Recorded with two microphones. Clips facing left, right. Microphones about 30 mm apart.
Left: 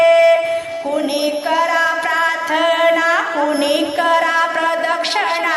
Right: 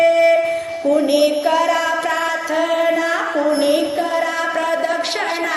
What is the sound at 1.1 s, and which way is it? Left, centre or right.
Music, centre.